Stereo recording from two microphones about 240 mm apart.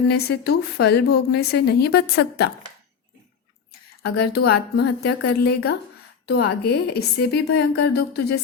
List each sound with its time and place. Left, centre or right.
0.1 s a woman's voice: left
4.0 s a woman's voice: left